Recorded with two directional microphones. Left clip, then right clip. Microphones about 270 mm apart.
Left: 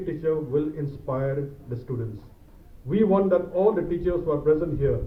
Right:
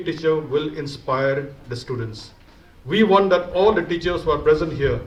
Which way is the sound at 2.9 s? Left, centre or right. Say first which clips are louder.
Right 6 dB; right.